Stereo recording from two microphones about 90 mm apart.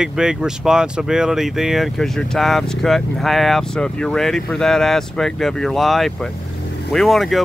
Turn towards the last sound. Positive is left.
turn(degrees=0)  # may be behind; listen again after turning